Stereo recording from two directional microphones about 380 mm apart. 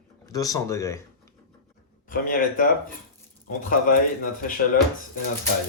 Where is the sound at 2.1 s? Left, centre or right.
Left.